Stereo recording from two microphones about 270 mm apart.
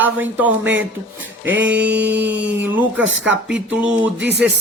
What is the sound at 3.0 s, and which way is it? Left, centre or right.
Speech, right.